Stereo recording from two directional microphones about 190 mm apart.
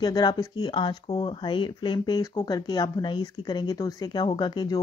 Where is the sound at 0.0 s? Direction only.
20° left (ahead or behind).